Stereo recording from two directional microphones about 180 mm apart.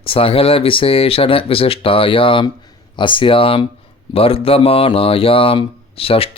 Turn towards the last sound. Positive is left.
turn(degrees=30)  # may be behind; listen again after turning